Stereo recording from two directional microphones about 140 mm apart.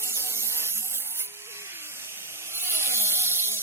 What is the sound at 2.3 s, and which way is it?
Wood, 15° right (ahead or behind).